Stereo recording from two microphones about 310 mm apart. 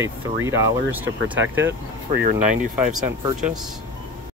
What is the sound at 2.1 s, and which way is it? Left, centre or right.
Speech, right.